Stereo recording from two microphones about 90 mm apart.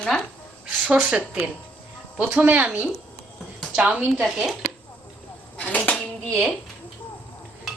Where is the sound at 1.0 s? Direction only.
10° right (ahead or behind).